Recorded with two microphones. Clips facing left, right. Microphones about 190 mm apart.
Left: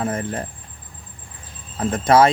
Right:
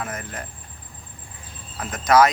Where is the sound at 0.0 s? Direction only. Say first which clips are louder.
Left 8 dB; 30° left (ahead or behind).